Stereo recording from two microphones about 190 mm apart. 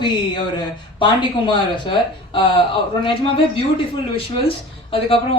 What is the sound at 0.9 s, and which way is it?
Speech, 25° left (ahead or behind).